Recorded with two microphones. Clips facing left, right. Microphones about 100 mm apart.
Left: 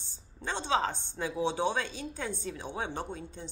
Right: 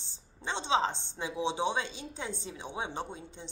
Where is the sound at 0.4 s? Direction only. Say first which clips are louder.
Even; 20° right (ahead or behind).